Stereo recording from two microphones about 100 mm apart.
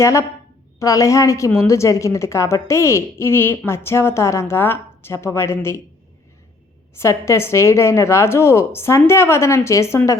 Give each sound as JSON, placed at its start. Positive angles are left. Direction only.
{"t": 0.0, "sound": "a woman's voice", "side_deg": 30}
{"t": 6.9, "sound": "a woman's voice", "side_deg": 30}